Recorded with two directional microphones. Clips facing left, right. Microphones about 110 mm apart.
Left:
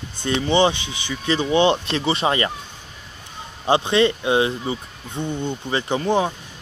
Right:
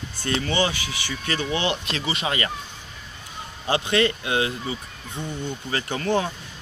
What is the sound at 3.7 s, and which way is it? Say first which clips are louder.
Speech: left 4 dB; 25° left (ahead or behind).